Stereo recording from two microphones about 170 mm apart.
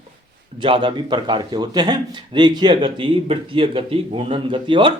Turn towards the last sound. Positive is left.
turn(degrees=-30)  # may be behind; listen again after turning